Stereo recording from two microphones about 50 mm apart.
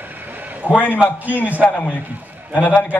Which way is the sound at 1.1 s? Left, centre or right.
Right.